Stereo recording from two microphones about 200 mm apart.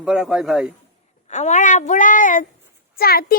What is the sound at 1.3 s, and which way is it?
A woman's voice, 35° left (ahead or behind).